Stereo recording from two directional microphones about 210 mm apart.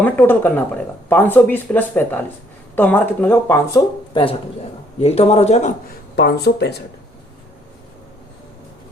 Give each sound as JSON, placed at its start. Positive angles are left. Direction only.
{"t": 0.0, "sound": "speech", "side_deg": 10}
{"t": 6.1, "sound": "speech", "side_deg": 50}